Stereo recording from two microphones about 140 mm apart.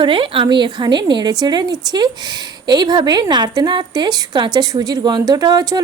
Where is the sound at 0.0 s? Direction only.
35° right (ahead or behind).